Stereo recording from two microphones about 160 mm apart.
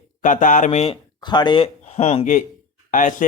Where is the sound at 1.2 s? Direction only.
25° left (ahead or behind).